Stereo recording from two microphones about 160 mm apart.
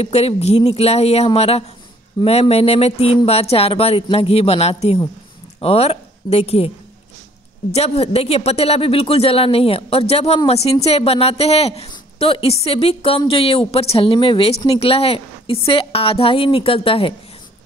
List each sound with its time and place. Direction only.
0.0 s speech: 40° left (ahead or behind)
7.7 s speech: 40° left (ahead or behind)